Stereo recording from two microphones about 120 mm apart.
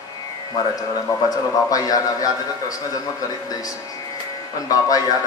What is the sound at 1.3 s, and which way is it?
A man's voice, 30° left (ahead or behind).